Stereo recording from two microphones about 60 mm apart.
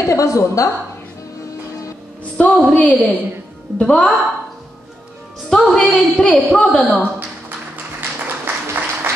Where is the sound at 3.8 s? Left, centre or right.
Centre.